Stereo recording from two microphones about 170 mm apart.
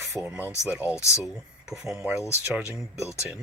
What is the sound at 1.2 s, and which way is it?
Speech, 5° right (ahead or behind).